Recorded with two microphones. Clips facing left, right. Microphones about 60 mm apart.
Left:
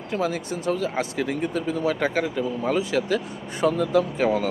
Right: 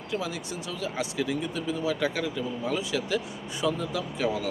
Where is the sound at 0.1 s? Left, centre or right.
Left.